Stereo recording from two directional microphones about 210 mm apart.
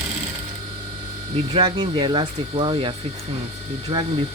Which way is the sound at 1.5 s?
25° right (ahead or behind).